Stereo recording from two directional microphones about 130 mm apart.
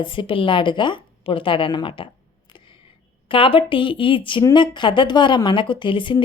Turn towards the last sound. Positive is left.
turn(degrees=40)  # may be behind; listen again after turning